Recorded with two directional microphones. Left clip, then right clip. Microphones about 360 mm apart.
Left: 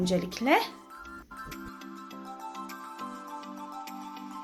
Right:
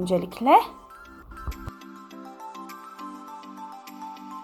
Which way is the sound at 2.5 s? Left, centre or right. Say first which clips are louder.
Right 1 dB; centre.